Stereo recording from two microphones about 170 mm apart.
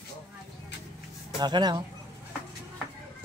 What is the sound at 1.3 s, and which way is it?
Speech, 25° right (ahead or behind).